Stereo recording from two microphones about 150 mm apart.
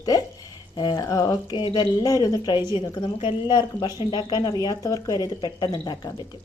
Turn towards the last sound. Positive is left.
turn(degrees=30)  # may be behind; listen again after turning